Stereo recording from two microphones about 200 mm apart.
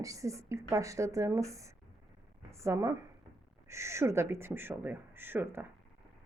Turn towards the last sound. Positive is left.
turn(degrees=-10)  # may be behind; listen again after turning